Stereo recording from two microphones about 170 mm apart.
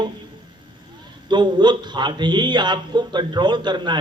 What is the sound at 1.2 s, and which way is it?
A man's voice, 25° right (ahead or behind).